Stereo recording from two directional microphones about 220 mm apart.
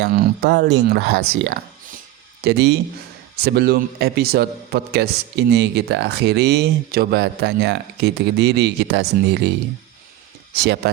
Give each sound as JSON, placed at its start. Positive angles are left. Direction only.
{"t": 0.0, "sound": "a man's voice", "side_deg": -50}
{"t": 10.5, "sound": "speech", "side_deg": -50}